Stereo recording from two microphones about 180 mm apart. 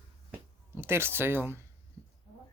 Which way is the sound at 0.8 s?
15° right (ahead or behind).